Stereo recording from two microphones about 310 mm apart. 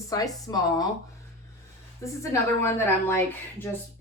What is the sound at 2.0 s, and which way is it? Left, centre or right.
A woman's voice, centre.